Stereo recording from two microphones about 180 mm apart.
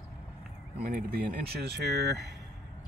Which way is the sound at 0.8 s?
60° right (ahead or behind).